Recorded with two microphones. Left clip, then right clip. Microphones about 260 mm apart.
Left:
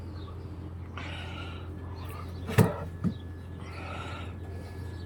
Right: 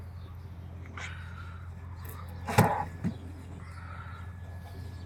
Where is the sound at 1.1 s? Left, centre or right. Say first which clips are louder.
Left 5 dB; left.